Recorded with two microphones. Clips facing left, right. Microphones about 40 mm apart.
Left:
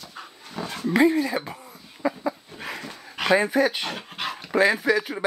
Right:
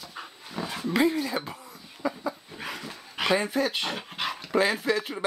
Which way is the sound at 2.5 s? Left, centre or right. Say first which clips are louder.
Left 2 dB; centre.